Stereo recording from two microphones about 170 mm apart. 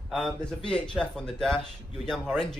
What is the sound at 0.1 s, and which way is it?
Speech, 5° left (ahead or behind).